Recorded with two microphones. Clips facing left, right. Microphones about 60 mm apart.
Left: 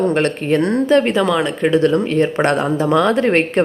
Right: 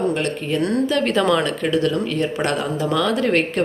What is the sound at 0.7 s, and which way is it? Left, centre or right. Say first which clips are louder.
Speech: left 6 dB; left.